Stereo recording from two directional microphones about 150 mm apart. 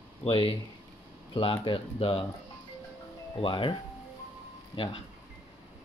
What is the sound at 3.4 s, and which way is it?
Speech, 35° left (ahead or behind).